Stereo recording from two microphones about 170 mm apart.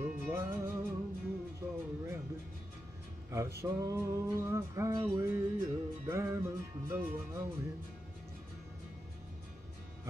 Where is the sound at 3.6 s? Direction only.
20° right (ahead or behind).